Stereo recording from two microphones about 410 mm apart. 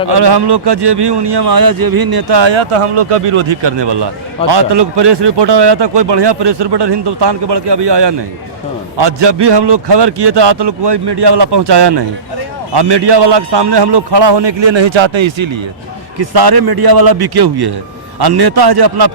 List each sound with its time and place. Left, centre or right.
0.1 s a man's voice: right
16.1 s a man's voice: right